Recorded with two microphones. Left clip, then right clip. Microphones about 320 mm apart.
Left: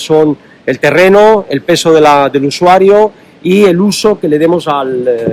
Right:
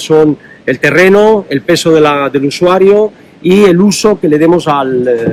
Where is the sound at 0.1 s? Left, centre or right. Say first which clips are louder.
Right 1 dB; centre.